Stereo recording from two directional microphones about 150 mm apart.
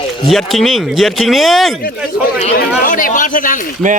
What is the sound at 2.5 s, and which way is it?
Speech, 65° left (ahead or behind).